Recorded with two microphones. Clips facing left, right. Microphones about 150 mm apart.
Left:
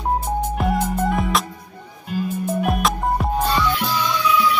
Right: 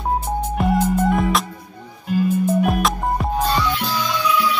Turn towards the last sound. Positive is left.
turn(degrees=0)  # may be behind; listen again after turning